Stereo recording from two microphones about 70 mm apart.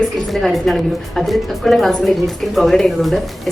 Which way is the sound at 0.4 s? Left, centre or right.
Centre.